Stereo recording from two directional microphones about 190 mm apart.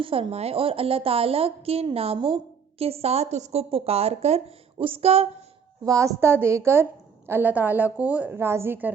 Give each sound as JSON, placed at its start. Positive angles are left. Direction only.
{"t": 0.0, "sound": "a woman's voice", "side_deg": -30}
{"t": 5.8, "sound": "a woman's voice", "side_deg": -15}